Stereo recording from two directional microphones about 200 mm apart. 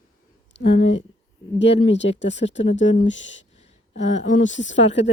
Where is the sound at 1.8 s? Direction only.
65° left (ahead or behind).